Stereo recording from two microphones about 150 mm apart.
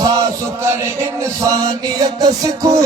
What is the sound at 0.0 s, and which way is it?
Chant, 25° right (ahead or behind).